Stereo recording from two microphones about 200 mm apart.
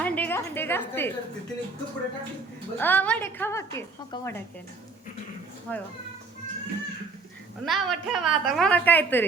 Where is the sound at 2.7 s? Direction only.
10° left (ahead or behind).